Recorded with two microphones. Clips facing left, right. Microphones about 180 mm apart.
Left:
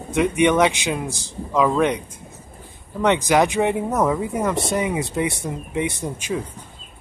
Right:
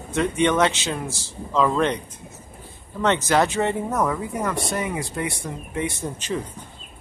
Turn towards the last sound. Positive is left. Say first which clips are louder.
# left 2 dB
turn(degrees=10)  # may be behind; listen again after turning